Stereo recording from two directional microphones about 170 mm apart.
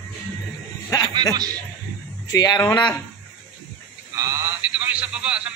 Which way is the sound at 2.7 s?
10° left (ahead or behind).